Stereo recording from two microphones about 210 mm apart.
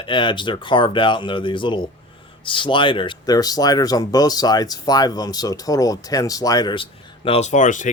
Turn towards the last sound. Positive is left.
turn(degrees=35)  # may be behind; listen again after turning